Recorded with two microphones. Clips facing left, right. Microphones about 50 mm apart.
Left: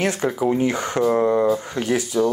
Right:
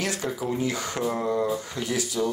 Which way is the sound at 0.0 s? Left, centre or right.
Left.